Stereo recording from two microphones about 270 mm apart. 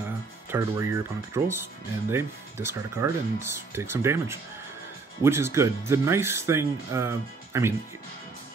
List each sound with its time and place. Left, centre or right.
0.5 s speech: centre